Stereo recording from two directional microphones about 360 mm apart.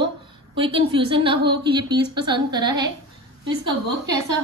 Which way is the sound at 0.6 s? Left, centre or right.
Centre.